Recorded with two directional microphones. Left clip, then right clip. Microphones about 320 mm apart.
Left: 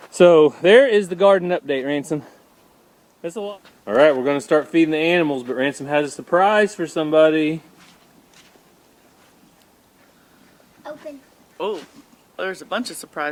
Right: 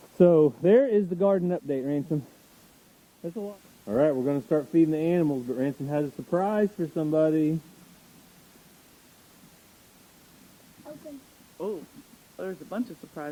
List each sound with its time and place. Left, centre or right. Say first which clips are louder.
0.2 s speech: left 8 dB; centre
3.8 s speech: left 9 dB; centre
11.5 s speech: left 8 dB; left
12.4 s speech: left 9 dB; centre